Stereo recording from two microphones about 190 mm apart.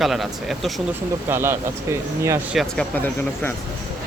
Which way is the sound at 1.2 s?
10° right (ahead or behind).